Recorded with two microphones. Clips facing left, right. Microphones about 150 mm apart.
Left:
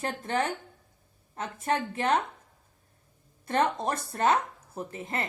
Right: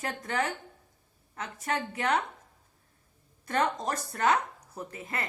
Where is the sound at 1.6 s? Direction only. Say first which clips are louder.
Left 3 dB; 25° left (ahead or behind).